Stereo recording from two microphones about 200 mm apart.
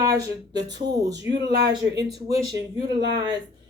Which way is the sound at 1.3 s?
60° right (ahead or behind).